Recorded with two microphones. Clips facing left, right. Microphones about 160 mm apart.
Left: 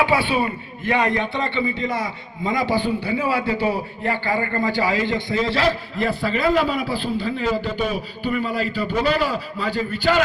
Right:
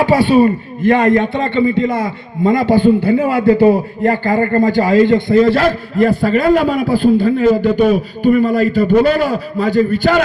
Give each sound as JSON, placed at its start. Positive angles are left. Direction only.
{"t": 0.0, "sound": "a man's voice", "side_deg": -40}